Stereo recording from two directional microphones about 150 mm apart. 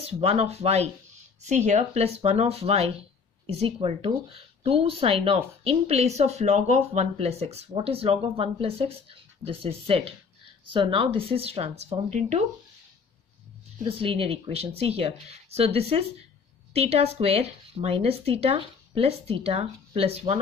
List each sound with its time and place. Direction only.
0.0 s speech: 40° right (ahead or behind)
13.8 s speech: 35° right (ahead or behind)